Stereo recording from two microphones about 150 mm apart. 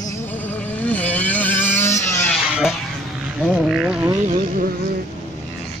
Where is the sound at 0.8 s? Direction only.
10° left (ahead or behind).